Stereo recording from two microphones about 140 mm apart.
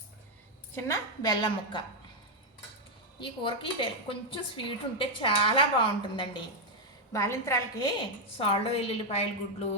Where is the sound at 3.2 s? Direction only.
35° left (ahead or behind).